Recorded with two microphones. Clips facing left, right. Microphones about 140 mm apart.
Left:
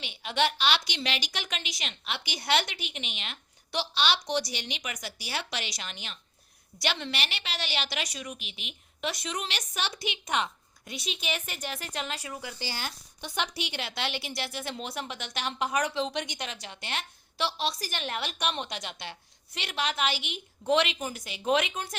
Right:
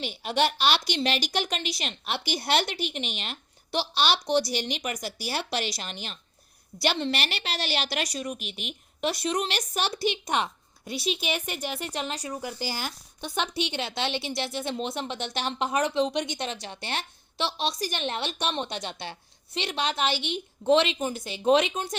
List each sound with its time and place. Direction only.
0.0 s a woman's voice: 40° right (ahead or behind)
11.1 s a woman's voice: 5° right (ahead or behind)
11.9 s a woman's voice: 35° right (ahead or behind)
12.4 s speech: 15° right (ahead or behind)